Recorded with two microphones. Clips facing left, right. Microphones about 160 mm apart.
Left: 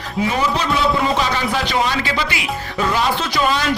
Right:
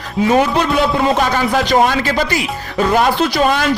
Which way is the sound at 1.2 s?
45° right (ahead or behind).